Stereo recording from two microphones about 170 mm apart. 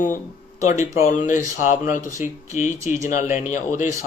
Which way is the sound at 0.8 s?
20° right (ahead or behind).